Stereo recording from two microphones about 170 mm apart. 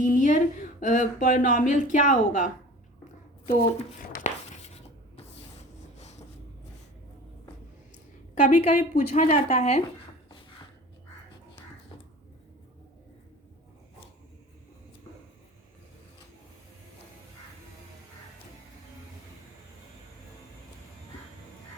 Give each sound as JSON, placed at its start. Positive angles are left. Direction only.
{"t": 0.0, "sound": "speech", "side_deg": 50}
{"t": 3.5, "sound": "a sound", "side_deg": 40}
{"t": 8.4, "sound": "speech", "side_deg": 45}